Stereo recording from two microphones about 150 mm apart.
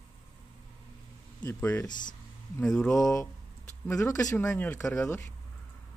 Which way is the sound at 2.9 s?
20° left (ahead or behind).